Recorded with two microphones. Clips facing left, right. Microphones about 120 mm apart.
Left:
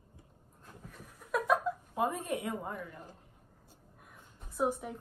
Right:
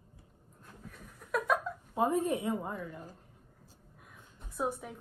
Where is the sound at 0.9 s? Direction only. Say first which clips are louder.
Even; centre (ahead or behind).